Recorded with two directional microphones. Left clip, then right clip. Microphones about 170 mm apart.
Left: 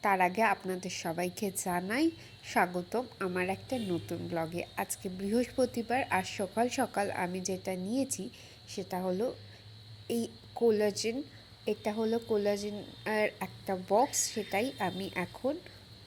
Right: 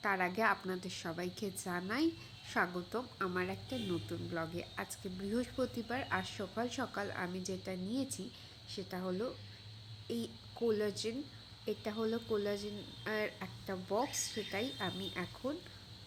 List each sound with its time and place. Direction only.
0.0 s speech: 25° left (ahead or behind)
10.7 s speech: 25° left (ahead or behind)